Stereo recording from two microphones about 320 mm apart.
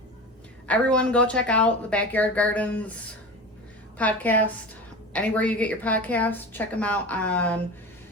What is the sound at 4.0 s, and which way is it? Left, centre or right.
A woman's voice, centre.